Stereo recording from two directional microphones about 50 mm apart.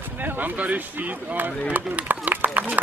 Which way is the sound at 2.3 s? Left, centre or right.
Right.